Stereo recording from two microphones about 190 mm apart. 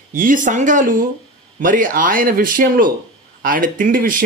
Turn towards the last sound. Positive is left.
turn(degrees=-45)  # may be behind; listen again after turning